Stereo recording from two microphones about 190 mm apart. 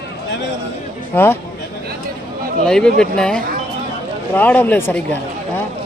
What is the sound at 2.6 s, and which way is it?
Speech, 5° left (ahead or behind).